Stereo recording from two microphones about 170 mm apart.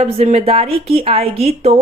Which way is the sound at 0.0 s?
40° right (ahead or behind).